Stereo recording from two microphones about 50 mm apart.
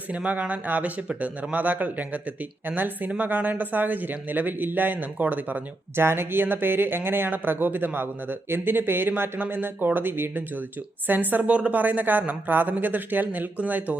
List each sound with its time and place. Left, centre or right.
0.1 s a woman's voice: right
6.0 s a woman's voice: right